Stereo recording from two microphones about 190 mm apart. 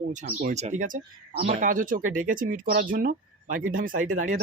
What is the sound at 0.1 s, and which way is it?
Speech, 40° right (ahead or behind).